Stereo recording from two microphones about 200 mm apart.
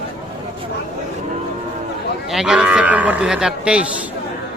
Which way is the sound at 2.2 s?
Centre (ahead or behind).